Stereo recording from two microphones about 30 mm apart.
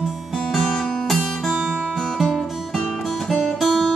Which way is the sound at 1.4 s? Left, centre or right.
Centre.